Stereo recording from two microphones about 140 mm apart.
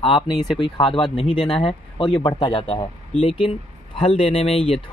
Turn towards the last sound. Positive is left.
turn(degrees=45)  # may be behind; listen again after turning